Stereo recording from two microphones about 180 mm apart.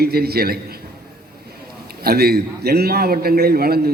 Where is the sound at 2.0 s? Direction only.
60° right (ahead or behind).